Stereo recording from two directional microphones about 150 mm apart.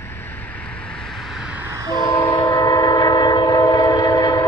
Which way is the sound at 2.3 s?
25° left (ahead or behind).